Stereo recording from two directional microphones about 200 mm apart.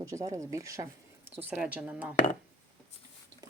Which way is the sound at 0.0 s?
15° right (ahead or behind).